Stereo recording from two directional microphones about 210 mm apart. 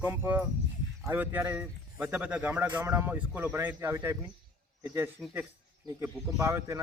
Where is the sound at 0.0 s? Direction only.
10° right (ahead or behind).